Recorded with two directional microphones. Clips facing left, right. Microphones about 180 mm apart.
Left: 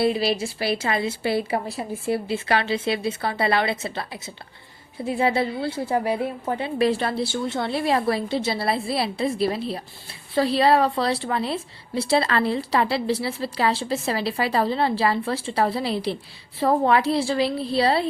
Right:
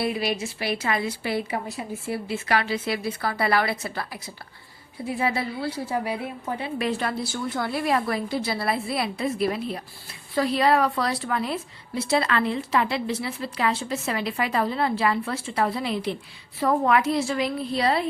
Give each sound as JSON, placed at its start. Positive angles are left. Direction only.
{"t": 0.0, "sound": "a woman's voice", "side_deg": 30}